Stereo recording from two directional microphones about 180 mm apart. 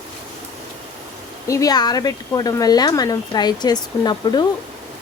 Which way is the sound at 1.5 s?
20° left (ahead or behind).